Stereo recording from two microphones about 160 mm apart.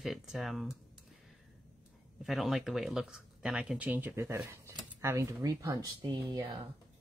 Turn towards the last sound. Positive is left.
turn(degrees=-25)  # may be behind; listen again after turning